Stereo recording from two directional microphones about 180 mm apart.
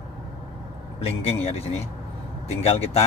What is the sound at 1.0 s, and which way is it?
Speech, 35° left (ahead or behind).